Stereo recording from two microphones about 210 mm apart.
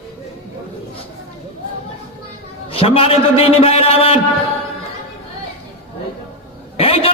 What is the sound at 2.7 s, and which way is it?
A man's voice, 25° left (ahead or behind).